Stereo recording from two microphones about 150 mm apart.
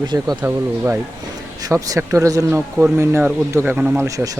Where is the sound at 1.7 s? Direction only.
20° right (ahead or behind).